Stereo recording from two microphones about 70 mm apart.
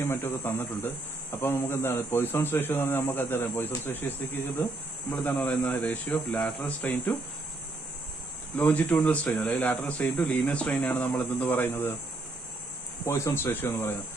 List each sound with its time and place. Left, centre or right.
0.0 s a man's voice: left
8.5 s speech: left
13.0 s a man's voice: left